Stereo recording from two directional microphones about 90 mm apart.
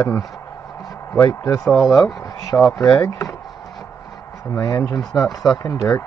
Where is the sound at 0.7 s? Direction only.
40° left (ahead or behind).